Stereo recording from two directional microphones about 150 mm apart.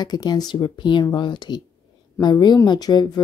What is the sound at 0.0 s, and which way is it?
A woman's voice, 30° left (ahead or behind).